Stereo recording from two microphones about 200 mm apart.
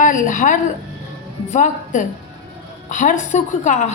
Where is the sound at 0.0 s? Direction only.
40° left (ahead or behind).